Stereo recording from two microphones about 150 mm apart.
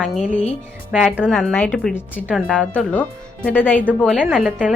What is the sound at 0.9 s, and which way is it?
Speech, 10° right (ahead or behind).